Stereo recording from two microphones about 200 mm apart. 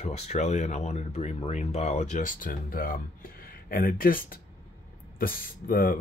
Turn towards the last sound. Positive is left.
turn(degrees=45)  # may be behind; listen again after turning